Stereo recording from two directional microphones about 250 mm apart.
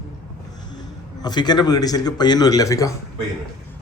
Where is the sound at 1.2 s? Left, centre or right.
Centre.